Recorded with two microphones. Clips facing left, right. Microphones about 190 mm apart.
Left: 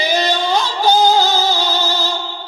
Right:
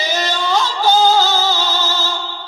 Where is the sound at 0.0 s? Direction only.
15° left (ahead or behind).